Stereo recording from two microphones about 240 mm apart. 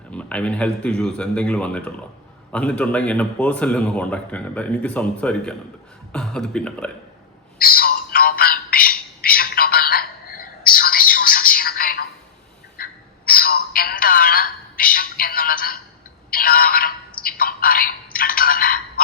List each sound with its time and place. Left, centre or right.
0.1 s a man's voice: centre
7.6 s music: left
12.7 s telephone: left